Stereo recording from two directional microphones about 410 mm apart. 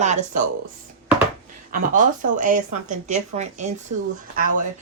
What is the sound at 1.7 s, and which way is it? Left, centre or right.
Speech, centre.